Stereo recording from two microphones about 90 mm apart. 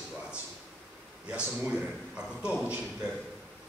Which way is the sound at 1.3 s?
10° right (ahead or behind).